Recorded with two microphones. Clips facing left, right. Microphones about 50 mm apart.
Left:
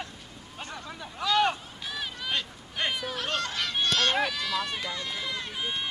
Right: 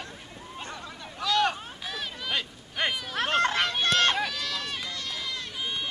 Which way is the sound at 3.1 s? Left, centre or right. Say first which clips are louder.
Right 6 dB; right.